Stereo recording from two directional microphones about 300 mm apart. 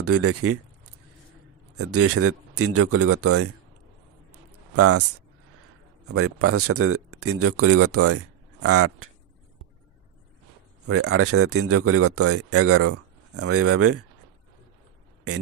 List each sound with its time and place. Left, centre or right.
0.0 s speech: right
1.8 s speech: right
4.3 s a sound: right
6.0 s speech: right
10.9 s speech: right